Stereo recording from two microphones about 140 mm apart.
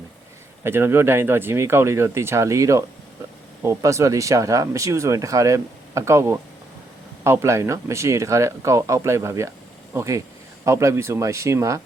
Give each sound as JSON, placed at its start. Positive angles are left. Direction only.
{"t": 0.6, "sound": "speech", "side_deg": -15}